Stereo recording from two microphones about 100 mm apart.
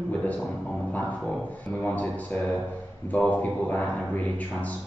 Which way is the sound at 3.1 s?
15° left (ahead or behind).